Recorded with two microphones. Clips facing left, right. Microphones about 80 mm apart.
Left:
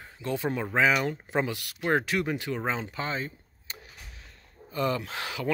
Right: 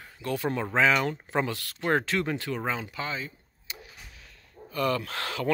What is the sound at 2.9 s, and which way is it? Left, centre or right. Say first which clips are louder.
Door: left 2 dB; left.